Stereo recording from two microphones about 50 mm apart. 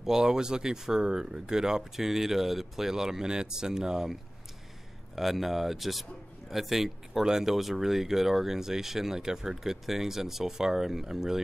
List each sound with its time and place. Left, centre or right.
0.0 s speech: centre